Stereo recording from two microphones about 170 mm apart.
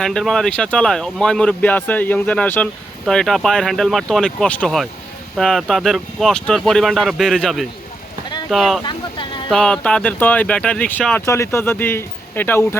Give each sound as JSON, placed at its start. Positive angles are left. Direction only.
{"t": 0.0, "sound": "speech", "side_deg": 5}
{"t": 8.8, "sound": "speech", "side_deg": 25}
{"t": 9.5, "sound": "speech", "side_deg": 5}